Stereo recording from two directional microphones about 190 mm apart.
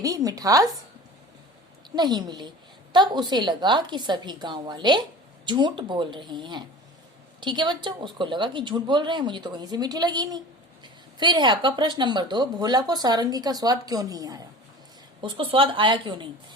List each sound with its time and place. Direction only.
0.0 s speech: 20° right (ahead or behind)
2.0 s speech: 20° right (ahead or behind)